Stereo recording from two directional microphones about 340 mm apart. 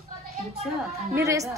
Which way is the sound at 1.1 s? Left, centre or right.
Centre.